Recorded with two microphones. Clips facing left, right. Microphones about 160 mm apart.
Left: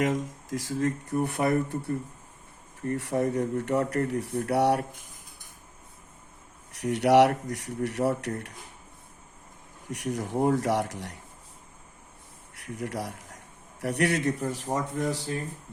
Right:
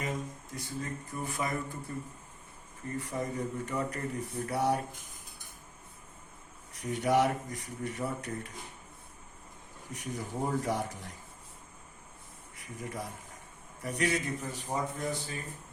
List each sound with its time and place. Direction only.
0.0 s speech: 90° left; by 1.8 s 65° left (ahead or behind)
2.8 s speech: 70° left (ahead or behind)
6.7 s speech: 75° left (ahead or behind)
9.9 s speech: 75° left (ahead or behind)
12.5 s speech: 75° left (ahead or behind); by 15.4 s 90° left